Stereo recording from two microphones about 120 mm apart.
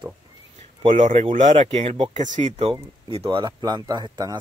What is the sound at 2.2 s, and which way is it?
Speech, 85° right.